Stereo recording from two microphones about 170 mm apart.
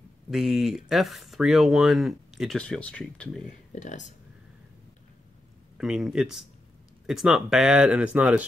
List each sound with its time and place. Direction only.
0.3 s speech: centre (ahead or behind)
3.4 s speech: 45° left (ahead or behind)
5.8 s speech: centre (ahead or behind)